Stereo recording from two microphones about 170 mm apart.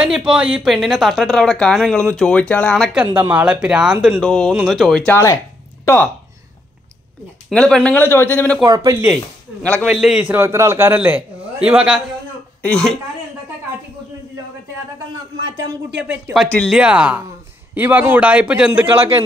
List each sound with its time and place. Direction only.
0.0 s speech: 5° right (ahead or behind)
3.2 s speech: 10° right (ahead or behind)
5.1 s speech: 15° left (ahead or behind)
7.4 s speech: 5° left (ahead or behind)
8.6 s speech: 20° right (ahead or behind)
9.6 s speech: 10° left (ahead or behind)
9.9 s a man's voice: 5° right (ahead or behind)
12.6 s speech: 5° left (ahead or behind)
16.5 s a man's voice: centre (ahead or behind)